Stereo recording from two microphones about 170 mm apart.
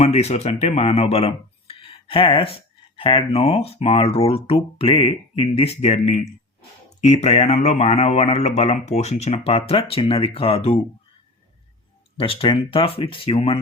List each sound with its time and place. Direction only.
0.0 s speech: 40° left (ahead or behind)
12.1 s speech: 30° left (ahead or behind)